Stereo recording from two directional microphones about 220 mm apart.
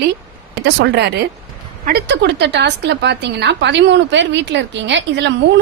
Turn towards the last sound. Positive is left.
turn(degrees=-55)  # may be behind; listen again after turning